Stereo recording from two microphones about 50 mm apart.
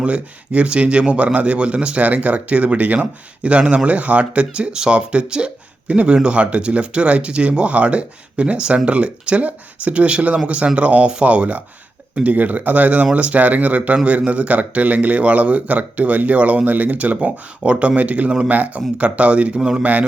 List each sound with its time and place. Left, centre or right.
0.0 s speech: right